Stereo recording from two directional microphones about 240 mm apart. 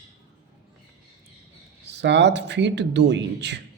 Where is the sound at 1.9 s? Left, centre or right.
Right.